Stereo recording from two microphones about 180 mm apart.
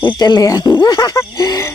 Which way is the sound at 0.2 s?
20° left (ahead or behind).